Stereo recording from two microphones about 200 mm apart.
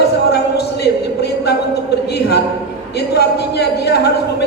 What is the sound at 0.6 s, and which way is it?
Speech, 55° left (ahead or behind).